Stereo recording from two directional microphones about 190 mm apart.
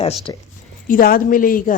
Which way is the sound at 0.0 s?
30° left (ahead or behind).